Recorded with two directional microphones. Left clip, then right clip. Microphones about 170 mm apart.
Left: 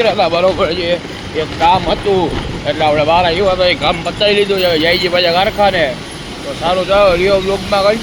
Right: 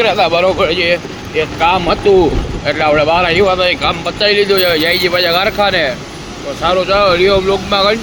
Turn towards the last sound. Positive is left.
turn(degrees=-20)  # may be behind; listen again after turning